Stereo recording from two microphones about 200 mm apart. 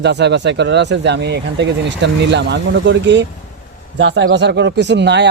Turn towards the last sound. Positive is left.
turn(degrees=-60)  # may be behind; listen again after turning